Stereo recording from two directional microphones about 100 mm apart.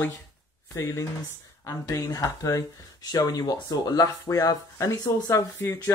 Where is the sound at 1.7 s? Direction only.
35° left (ahead or behind).